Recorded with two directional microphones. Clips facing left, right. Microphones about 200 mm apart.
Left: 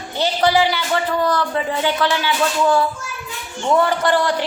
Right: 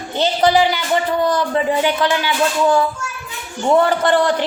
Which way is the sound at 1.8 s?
15° right (ahead or behind).